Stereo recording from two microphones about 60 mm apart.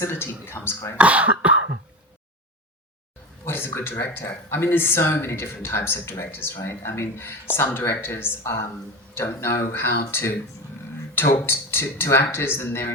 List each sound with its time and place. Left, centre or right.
0.0 s speech: left
0.9 s speech: right
3.4 s speech: left